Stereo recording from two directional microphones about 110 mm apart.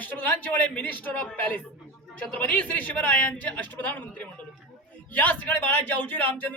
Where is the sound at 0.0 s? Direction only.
15° left (ahead or behind).